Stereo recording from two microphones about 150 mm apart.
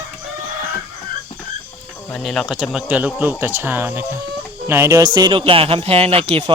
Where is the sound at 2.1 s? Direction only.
Centre (ahead or behind).